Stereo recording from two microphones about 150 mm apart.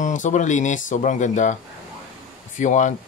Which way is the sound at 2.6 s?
55° left (ahead or behind).